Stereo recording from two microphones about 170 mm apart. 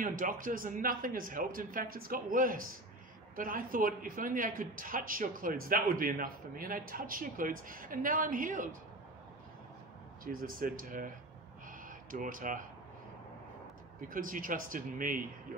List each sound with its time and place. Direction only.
0.0 s speech: 55° right (ahead or behind)
10.2 s speech: 55° right (ahead or behind)
14.0 s speech: 55° right (ahead or behind)